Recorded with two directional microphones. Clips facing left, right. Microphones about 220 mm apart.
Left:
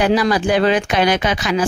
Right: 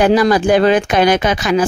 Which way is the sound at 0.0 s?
45° right (ahead or behind).